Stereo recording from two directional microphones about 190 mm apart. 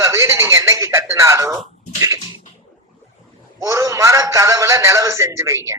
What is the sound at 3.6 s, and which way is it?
A man's voice, 15° right (ahead or behind).